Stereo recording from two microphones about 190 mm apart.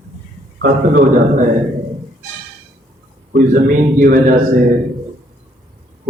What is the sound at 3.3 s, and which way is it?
A man's voice, 45° right (ahead or behind).